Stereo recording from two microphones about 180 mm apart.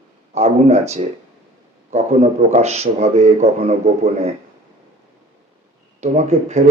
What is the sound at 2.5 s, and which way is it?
A man's voice, 35° right (ahead or behind).